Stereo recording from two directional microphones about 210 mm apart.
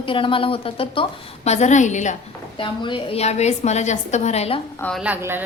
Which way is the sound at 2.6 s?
25° left (ahead or behind).